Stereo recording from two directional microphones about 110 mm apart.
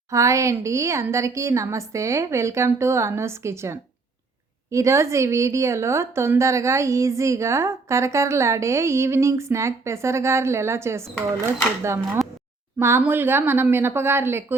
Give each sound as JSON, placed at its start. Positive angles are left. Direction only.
{"t": 0.1, "sound": "a woman's voice", "side_deg": -30}